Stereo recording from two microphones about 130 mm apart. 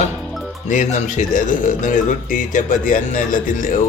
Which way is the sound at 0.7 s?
70° left (ahead or behind).